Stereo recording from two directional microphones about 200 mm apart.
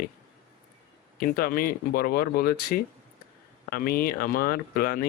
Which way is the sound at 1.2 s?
45° left (ahead or behind).